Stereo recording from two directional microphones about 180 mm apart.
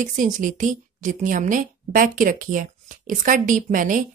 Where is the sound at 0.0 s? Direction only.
45° right (ahead or behind).